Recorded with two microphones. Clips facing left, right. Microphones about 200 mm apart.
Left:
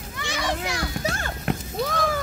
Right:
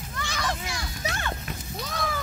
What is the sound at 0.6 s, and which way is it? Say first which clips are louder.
Children playing: left 6 dB; 65° left (ahead or behind).